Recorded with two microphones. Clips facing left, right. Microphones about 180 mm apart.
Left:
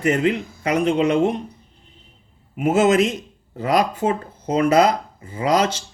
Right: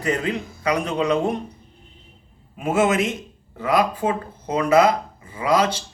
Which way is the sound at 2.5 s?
25° left (ahead or behind).